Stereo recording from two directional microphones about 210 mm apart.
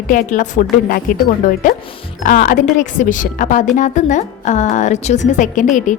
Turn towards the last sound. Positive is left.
turn(degrees=35)  # may be behind; listen again after turning